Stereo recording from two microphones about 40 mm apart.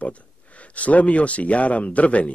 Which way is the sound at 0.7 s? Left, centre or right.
Left.